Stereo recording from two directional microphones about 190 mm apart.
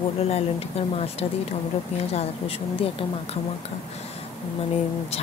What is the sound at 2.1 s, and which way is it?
Speech, 30° left (ahead or behind).